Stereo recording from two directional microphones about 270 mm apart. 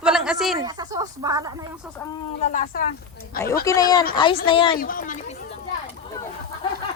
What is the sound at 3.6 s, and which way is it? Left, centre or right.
A child's voice, centre.